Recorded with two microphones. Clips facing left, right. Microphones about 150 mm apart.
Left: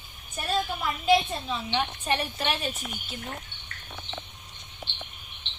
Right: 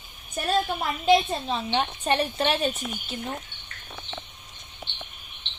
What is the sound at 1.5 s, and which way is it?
A woman's voice, 40° right (ahead or behind).